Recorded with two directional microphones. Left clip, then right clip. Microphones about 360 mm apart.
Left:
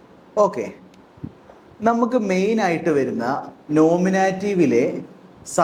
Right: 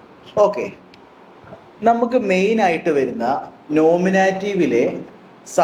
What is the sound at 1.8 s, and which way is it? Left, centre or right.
Speech, left.